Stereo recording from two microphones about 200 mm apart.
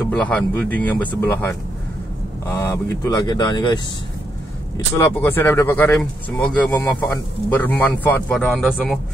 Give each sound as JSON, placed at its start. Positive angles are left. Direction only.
{"t": 0.0, "sound": "speech", "side_deg": 5}
{"t": 4.9, "sound": "a man's voice", "side_deg": 10}